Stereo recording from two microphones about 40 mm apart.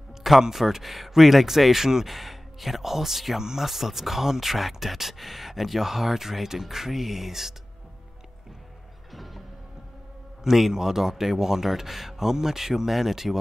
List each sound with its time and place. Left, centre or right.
0.4 s speech: centre
9.1 s music: centre
10.4 s speech: centre